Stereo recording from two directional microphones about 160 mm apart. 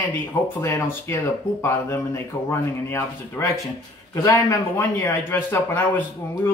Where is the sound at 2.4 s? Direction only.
15° left (ahead or behind).